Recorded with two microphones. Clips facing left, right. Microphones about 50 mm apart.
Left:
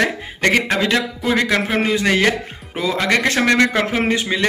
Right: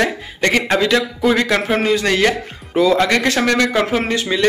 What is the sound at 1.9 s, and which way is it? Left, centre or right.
Speech, centre.